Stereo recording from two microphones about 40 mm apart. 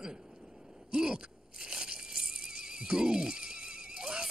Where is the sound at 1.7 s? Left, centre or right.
Centre.